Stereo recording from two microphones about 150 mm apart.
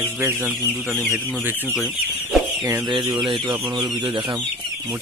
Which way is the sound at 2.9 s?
30° right (ahead or behind).